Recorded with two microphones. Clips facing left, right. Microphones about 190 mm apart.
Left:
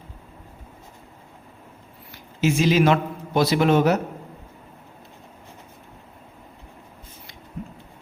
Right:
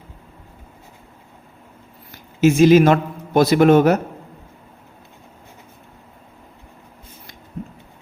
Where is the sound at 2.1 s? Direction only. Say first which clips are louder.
Right 7 dB; 50° right (ahead or behind).